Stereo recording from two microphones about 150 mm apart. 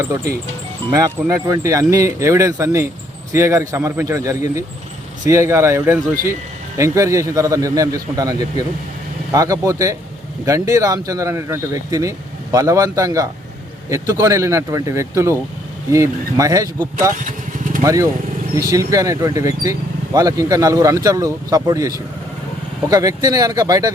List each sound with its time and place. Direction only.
0.0 s speech: 20° right (ahead or behind)
17.2 s vehicle: 65° right (ahead or behind)
17.8 s speech: 20° right (ahead or behind)